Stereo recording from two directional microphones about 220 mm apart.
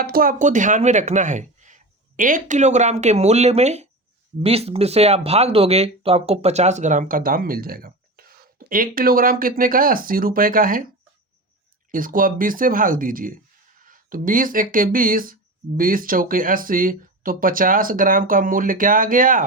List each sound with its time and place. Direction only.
0.0 s speech: 40° right (ahead or behind)
11.9 s speech: 40° right (ahead or behind)